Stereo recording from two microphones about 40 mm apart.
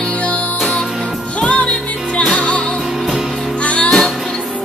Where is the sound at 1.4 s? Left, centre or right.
Left.